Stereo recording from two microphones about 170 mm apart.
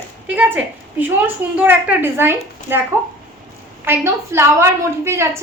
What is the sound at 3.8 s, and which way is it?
A woman's voice, 15° right (ahead or behind).